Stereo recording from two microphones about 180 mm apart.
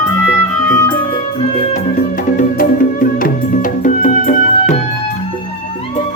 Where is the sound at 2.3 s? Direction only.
50° left (ahead or behind).